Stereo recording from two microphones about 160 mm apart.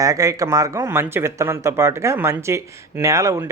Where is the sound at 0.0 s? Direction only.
20° right (ahead or behind).